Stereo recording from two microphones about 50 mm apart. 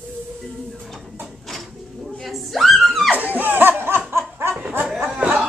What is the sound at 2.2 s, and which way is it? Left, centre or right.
Speech, centre.